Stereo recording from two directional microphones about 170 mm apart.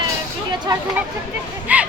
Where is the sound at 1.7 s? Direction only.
10° right (ahead or behind).